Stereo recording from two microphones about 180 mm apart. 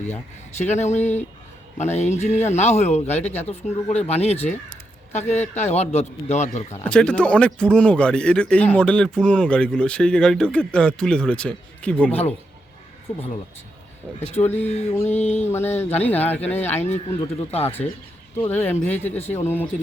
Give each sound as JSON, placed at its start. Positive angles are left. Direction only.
{"t": 0.1, "sound": "a man's voice", "side_deg": 40}
{"t": 6.8, "sound": "speech", "side_deg": 5}
{"t": 14.3, "sound": "a man's voice", "side_deg": 35}
{"t": 15.4, "sound": "speech", "side_deg": 10}
{"t": 17.2, "sound": "a man's voice", "side_deg": 35}
{"t": 18.3, "sound": "speech", "side_deg": 10}
{"t": 19.2, "sound": "a man's voice", "side_deg": 40}